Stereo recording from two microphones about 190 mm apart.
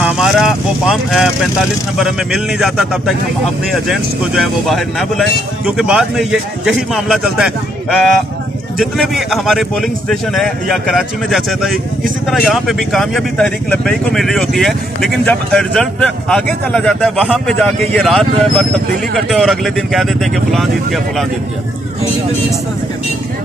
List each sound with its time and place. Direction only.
0.0 s speech: 5° right (ahead or behind)